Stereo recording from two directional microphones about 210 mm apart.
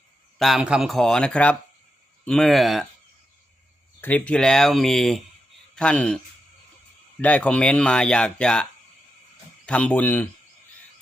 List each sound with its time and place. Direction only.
0.3 s speech: centre (ahead or behind)
4.0 s speech: 5° left (ahead or behind)
7.2 s speech: 5° left (ahead or behind)
9.6 s speech: 5° left (ahead or behind)